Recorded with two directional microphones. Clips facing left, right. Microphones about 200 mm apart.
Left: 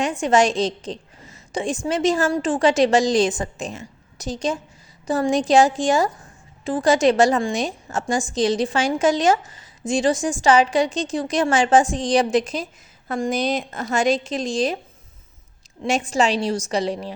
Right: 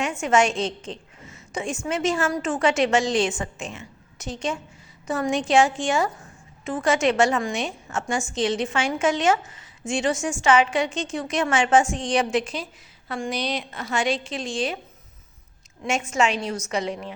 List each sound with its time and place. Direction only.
0.0 s a woman's voice: 35° left (ahead or behind)
15.8 s a woman's voice: 35° left (ahead or behind)